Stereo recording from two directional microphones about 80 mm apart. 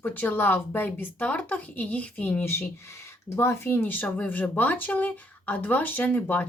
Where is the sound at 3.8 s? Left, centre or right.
Left.